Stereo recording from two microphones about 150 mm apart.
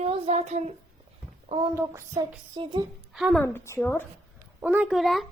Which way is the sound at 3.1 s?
Centre (ahead or behind).